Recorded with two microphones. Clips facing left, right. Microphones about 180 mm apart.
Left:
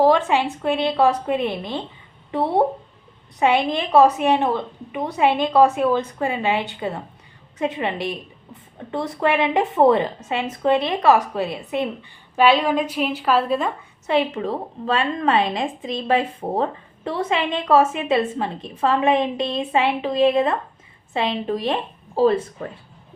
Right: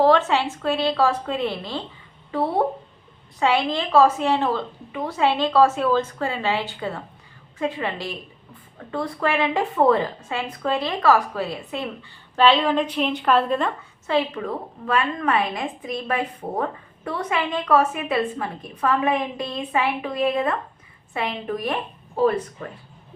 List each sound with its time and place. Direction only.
0.0 s a woman's voice: 15° left (ahead or behind)
12.4 s a woman's voice: 10° left (ahead or behind)
14.1 s a woman's voice: 25° left (ahead or behind)